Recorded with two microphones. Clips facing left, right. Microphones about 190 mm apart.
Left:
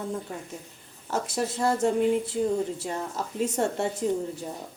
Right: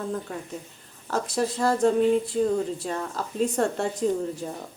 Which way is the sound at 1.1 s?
25° left (ahead or behind).